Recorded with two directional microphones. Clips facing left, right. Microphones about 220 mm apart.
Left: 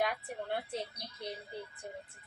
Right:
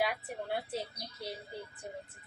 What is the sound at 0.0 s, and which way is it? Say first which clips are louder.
Speech: right 1 dB; 5° right (ahead or behind).